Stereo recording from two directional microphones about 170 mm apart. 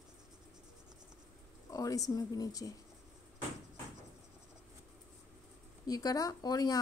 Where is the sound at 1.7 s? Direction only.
20° left (ahead or behind).